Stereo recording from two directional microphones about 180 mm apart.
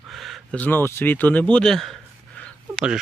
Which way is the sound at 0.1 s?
Centre (ahead or behind).